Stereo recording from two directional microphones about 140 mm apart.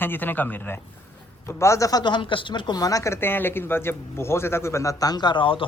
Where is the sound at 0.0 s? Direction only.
15° left (ahead or behind).